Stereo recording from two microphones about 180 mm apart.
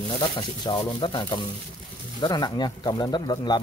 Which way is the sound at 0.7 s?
25° left (ahead or behind).